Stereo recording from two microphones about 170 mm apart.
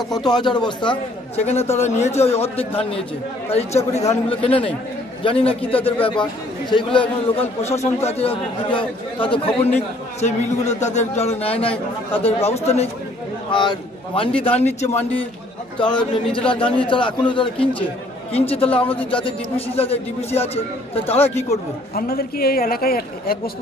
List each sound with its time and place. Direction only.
0.1 s a man's voice: 25° left (ahead or behind)
10.2 s a man's voice: 45° left (ahead or behind)
13.5 s a man's voice: 30° left (ahead or behind)
15.8 s a man's voice: 30° left (ahead or behind)
21.9 s a man's voice: 65° left (ahead or behind)